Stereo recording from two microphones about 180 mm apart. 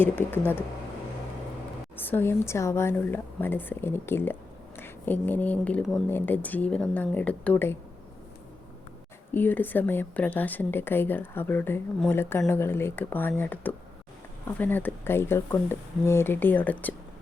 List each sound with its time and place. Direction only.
0.0 s a woman's voice: 10° left (ahead or behind)
2.0 s a woman's voice: 10° left (ahead or behind)
9.3 s a woman's voice: 10° left (ahead or behind)